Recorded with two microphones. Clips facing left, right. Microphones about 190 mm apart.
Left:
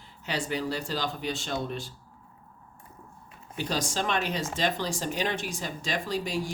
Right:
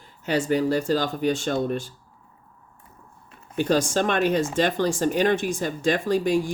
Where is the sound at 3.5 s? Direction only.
50° right (ahead or behind).